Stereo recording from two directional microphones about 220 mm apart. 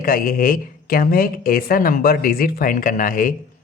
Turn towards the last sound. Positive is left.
turn(degrees=40)  # may be behind; listen again after turning